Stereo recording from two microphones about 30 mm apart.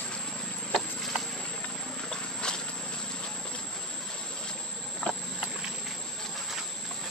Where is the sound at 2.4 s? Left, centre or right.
Left.